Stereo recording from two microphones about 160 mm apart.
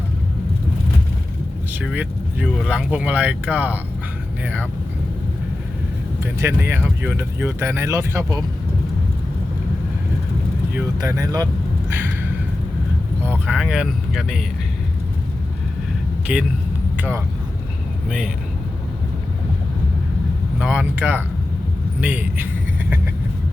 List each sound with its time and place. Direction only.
1.8 s speech: 5° right (ahead or behind)
6.2 s speech: 15° right (ahead or behind)
10.8 s speech: 20° right (ahead or behind)
11.9 s a sound: 15° right (ahead or behind)
13.2 s speech: 5° right (ahead or behind)
16.2 s speech: 10° right (ahead or behind)
20.6 s speech: 5° right (ahead or behind)